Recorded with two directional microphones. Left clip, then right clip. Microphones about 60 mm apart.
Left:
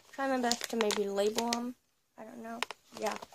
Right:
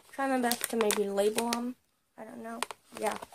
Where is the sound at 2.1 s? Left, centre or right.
Left.